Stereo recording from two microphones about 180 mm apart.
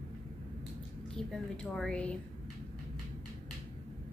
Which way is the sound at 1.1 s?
5° left (ahead or behind).